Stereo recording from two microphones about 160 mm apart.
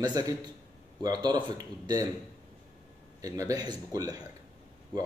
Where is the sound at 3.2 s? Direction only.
20° right (ahead or behind).